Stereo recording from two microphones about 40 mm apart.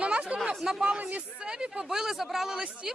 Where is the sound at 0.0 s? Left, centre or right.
Right.